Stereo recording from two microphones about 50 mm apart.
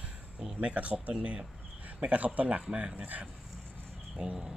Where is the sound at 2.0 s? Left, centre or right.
Right.